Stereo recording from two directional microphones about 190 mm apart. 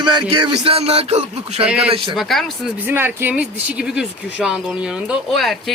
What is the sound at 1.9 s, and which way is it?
Speech, 30° right (ahead or behind).